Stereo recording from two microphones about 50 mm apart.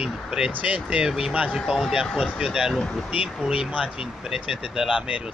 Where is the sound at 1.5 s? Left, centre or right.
Centre.